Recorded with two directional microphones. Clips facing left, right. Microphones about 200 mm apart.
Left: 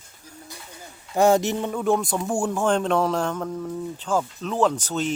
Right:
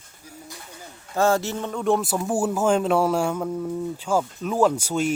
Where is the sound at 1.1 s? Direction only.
15° left (ahead or behind).